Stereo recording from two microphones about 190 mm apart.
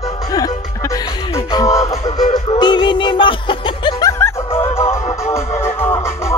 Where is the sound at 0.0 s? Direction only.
20° left (ahead or behind).